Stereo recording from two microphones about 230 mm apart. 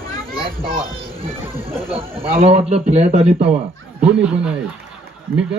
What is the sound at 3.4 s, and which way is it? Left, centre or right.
Speech, centre.